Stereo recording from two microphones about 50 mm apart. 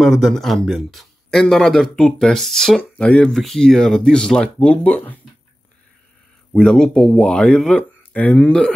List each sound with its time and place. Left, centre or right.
0.0 s speech: centre
3.0 s speech: left
3.3 s speech: centre
4.6 s speech: left
6.5 s speech: centre
8.1 s speech: left